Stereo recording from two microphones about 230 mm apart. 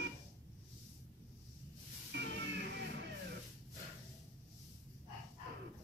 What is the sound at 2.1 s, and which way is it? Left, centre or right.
Music, right.